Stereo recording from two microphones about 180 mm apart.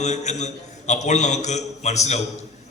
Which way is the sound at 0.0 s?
40° left (ahead or behind).